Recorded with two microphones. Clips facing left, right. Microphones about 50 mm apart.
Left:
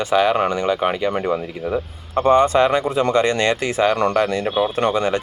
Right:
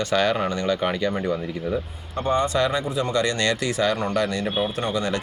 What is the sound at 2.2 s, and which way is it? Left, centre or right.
Speech, left.